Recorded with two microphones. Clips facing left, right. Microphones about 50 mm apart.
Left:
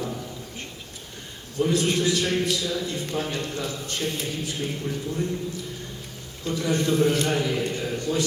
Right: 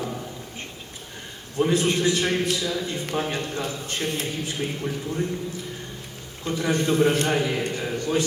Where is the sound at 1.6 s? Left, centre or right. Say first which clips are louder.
Right 1 dB; right.